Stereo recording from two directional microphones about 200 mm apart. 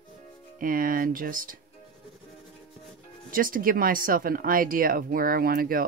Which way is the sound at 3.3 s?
45° right (ahead or behind).